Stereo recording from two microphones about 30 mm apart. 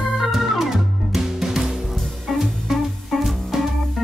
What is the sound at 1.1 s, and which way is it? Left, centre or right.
Music, centre.